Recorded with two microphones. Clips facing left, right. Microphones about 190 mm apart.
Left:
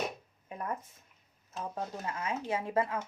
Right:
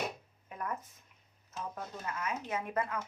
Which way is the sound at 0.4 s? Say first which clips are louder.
Left 2 dB; 25° left (ahead or behind).